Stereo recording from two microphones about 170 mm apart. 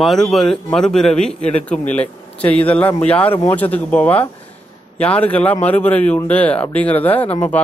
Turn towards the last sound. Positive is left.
turn(degrees=10)  # may be behind; listen again after turning